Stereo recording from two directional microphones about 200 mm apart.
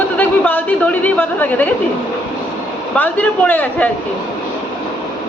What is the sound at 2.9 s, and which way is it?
Speech, 5° left (ahead or behind).